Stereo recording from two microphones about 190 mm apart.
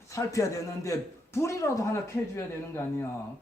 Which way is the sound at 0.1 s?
15° left (ahead or behind).